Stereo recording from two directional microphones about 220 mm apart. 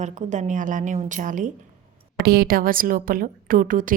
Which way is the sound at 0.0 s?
30° right (ahead or behind).